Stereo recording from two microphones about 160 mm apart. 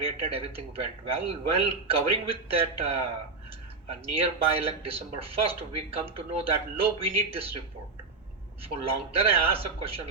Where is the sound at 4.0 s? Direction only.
35° right (ahead or behind).